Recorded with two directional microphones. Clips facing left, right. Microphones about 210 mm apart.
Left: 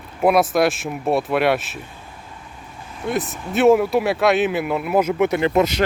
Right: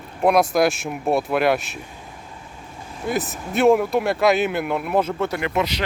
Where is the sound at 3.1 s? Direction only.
Centre (ahead or behind).